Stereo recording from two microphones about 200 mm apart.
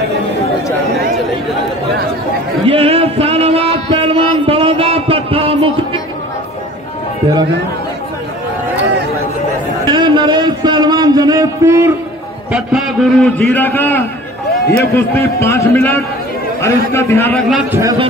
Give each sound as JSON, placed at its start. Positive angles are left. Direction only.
{"t": 2.7, "sound": "music", "side_deg": -30}
{"t": 9.8, "sound": "a sound", "side_deg": -20}
{"t": 12.5, "sound": "a man's voice", "side_deg": 0}
{"t": 17.5, "sound": "a man's voice", "side_deg": -5}